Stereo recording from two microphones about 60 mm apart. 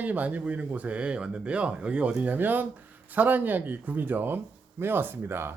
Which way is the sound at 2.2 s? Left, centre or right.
Right.